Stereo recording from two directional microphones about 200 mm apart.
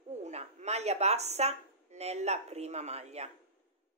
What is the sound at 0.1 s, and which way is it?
Speech, 35° right (ahead or behind).